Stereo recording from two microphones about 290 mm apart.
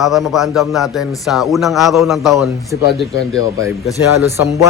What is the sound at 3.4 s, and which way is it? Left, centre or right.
Speech, centre.